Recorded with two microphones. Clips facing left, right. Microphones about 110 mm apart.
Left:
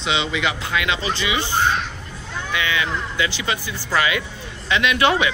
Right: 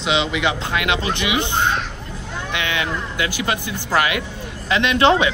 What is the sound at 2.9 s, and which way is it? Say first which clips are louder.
Speech: even; 50° right (ahead or behind).